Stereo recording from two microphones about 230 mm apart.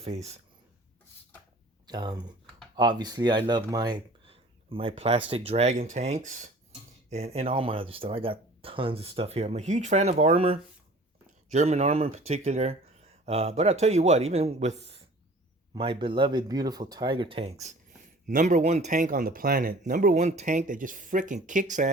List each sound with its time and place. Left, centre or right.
0.0 s speech: right
1.9 s speech: centre